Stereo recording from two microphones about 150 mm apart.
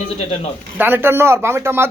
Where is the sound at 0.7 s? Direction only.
15° right (ahead or behind).